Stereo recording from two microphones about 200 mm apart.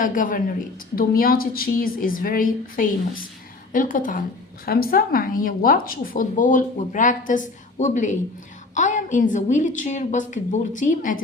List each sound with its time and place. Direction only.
0.0 s a woman's voice: 40° left (ahead or behind)